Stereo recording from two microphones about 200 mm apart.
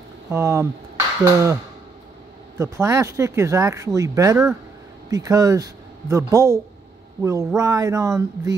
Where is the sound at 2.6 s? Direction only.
15° right (ahead or behind).